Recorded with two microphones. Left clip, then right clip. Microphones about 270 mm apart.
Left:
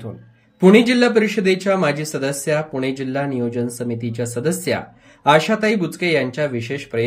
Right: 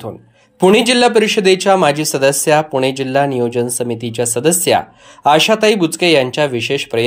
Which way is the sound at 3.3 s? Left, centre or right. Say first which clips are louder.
Right 7 dB; right.